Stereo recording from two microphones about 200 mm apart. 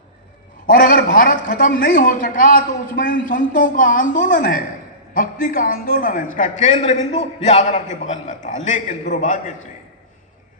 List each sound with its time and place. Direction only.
0.7 s a man's voice: 45° left (ahead or behind)